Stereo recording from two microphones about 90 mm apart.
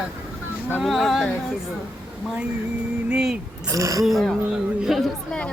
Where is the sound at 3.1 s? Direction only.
5° right (ahead or behind).